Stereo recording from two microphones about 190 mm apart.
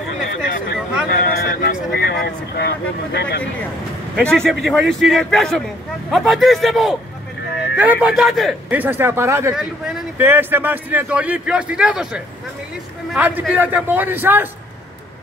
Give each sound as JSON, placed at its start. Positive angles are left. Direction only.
{"t": 1.1, "sound": "speech", "side_deg": 55}
{"t": 4.2, "sound": "a man's voice", "side_deg": 5}